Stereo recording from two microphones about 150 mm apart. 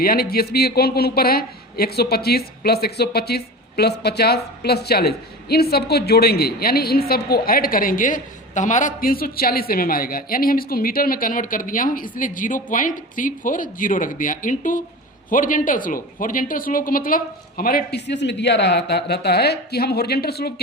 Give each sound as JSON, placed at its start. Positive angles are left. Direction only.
{"t": 0.0, "sound": "a man's voice", "side_deg": 80}